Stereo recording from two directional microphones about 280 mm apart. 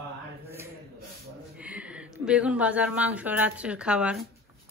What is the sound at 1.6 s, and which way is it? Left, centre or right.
Speech, centre.